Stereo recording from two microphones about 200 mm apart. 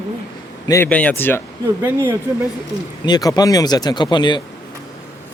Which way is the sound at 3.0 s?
20° left (ahead or behind).